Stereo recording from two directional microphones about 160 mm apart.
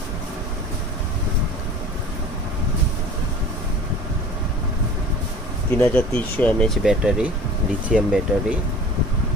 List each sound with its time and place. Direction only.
5.8 s speech: 10° left (ahead or behind); by 8.5 s 5° right (ahead or behind)